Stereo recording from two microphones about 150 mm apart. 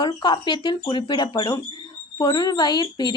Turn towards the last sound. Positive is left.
turn(degrees=25)  # may be behind; listen again after turning